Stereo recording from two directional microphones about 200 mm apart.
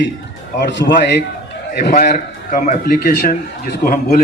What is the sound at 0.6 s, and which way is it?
A man's voice, 60° left (ahead or behind).